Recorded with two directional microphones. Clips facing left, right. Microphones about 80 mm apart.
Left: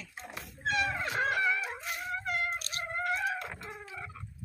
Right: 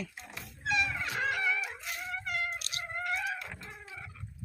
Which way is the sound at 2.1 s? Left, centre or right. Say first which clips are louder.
Left 2 dB; left.